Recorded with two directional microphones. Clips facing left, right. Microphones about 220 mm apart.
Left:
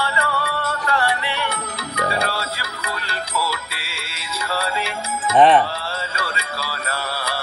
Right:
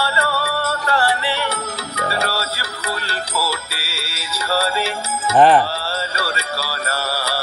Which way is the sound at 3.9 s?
40° right (ahead or behind).